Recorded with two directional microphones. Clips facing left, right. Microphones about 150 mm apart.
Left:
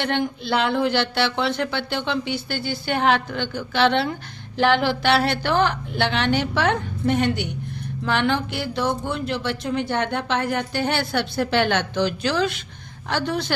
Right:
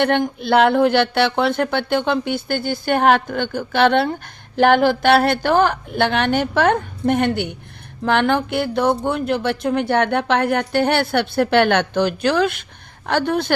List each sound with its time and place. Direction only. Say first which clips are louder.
0.0 s a woman's voice: right 6 dB; 55° right (ahead or behind)